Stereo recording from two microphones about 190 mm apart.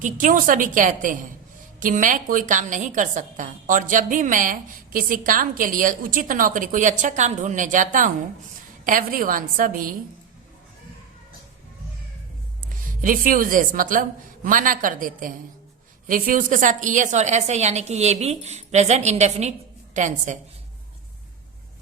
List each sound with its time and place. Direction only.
0.0 s a woman's voice: 45° right (ahead or behind)
13.0 s a woman's voice: 45° right (ahead or behind)